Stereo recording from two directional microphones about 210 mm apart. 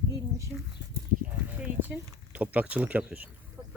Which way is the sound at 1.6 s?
10° right (ahead or behind).